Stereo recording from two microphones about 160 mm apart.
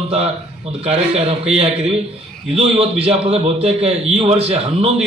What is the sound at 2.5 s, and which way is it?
A man's voice, 40° right (ahead or behind).